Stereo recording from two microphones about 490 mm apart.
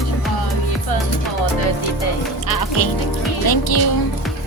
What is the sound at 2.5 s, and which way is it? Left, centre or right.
Music, left.